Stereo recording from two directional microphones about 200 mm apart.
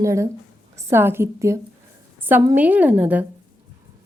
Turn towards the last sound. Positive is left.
turn(degrees=-10)  # may be behind; listen again after turning